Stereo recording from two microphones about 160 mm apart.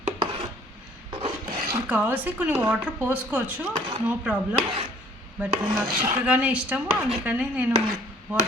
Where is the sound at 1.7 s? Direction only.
10° right (ahead or behind).